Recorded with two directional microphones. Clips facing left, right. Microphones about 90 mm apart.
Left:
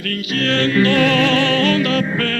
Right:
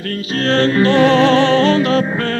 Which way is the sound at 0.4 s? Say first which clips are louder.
Right 3 dB; 35° right (ahead or behind).